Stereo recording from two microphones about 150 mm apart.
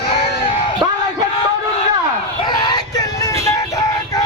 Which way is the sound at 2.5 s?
30° left (ahead or behind).